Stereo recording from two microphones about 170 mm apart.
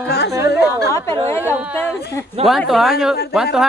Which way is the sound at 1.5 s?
10° right (ahead or behind).